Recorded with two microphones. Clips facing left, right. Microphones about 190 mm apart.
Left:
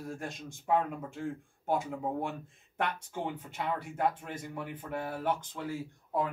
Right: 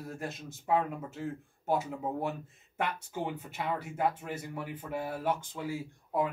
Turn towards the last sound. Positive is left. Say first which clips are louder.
# right 1 dB
turn(degrees=-10)  # may be behind; listen again after turning